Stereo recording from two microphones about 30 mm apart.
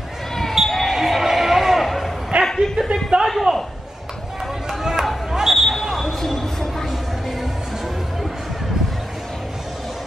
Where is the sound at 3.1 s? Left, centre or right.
Right.